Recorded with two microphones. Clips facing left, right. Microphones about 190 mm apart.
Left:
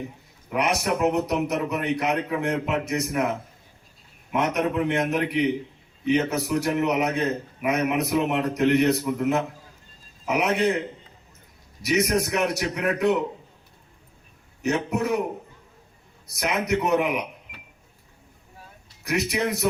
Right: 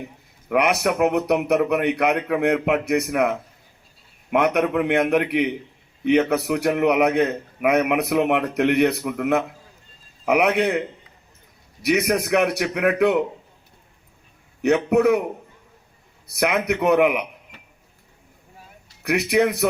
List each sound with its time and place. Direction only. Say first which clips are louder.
0.4 s a man's voice: right 5 dB; 60° right (ahead or behind)
4.3 s a man's voice: right 5 dB; 60° right (ahead or behind)
11.8 s a man's voice: right 2 dB; 60° right (ahead or behind)
14.6 s a man's voice: right 8 dB; 60° right (ahead or behind)
16.2 s a man's voice: right 5 dB; 60° right (ahead or behind)
19.0 s a man's voice: right 6 dB; 60° right (ahead or behind)